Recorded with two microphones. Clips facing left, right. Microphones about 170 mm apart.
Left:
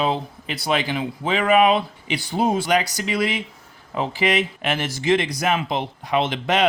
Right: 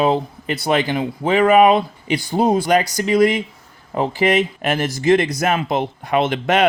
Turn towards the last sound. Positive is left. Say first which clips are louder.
# right 4 dB
turn(degrees=-55)  # may be behind; listen again after turning